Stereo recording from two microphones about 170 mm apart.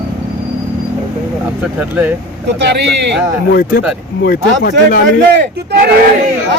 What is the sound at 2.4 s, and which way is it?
Speech, 90° right.